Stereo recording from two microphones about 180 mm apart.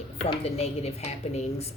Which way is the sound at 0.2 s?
35° left (ahead or behind).